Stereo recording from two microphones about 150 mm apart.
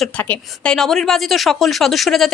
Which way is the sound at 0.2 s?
10° left (ahead or behind).